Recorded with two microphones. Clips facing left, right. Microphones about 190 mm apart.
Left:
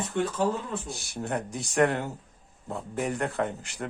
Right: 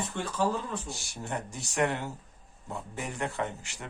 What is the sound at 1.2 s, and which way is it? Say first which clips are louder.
Speech: left 6 dB; 55° left (ahead or behind).